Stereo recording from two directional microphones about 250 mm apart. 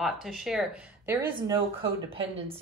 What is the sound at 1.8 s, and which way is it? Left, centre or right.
Speech, right.